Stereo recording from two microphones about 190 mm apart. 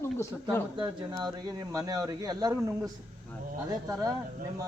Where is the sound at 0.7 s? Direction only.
25° right (ahead or behind).